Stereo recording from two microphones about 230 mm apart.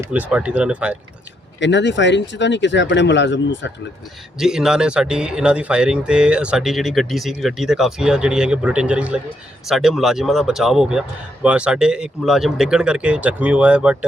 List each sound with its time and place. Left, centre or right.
0.0 s speech: centre
1.5 s speech: left
4.4 s speech: centre